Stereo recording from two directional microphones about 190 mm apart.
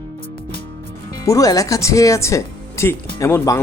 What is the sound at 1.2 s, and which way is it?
Speech, 15° left (ahead or behind).